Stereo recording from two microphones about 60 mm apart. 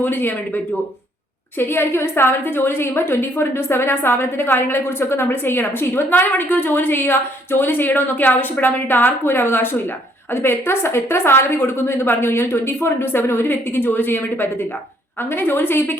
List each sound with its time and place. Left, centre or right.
0.0 s a woman's voice: left